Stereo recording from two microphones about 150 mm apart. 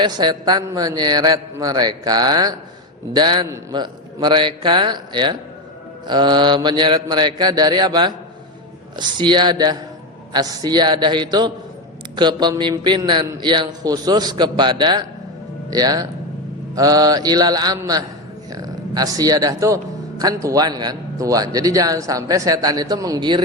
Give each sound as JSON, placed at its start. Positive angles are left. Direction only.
{"t": 0.0, "sound": "a man's voice", "side_deg": -30}